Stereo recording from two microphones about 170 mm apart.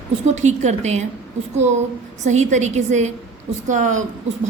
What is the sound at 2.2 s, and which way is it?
A woman's voice, 45° right (ahead or behind).